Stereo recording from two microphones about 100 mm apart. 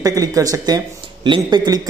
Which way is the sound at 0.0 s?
35° right (ahead or behind).